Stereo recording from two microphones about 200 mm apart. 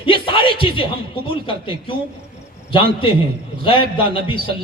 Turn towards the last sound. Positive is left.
turn(degrees=25)  # may be behind; listen again after turning